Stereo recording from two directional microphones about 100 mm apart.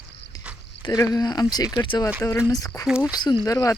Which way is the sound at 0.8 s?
40° left (ahead or behind).